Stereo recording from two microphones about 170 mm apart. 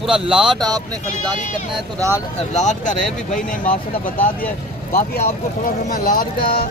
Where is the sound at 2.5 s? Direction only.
45° left (ahead or behind).